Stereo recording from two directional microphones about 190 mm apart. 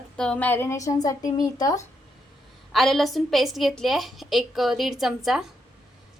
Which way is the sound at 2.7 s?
Centre (ahead or behind).